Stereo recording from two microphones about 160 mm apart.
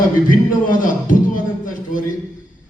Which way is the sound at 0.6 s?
60° left (ahead or behind).